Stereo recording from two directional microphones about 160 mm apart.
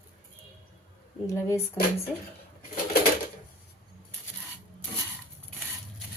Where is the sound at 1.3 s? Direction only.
20° left (ahead or behind).